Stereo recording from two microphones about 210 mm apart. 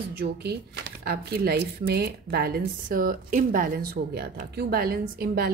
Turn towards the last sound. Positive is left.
turn(degrees=-45)  # may be behind; listen again after turning